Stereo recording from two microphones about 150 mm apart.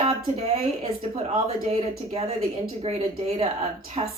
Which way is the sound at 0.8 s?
40° right (ahead or behind).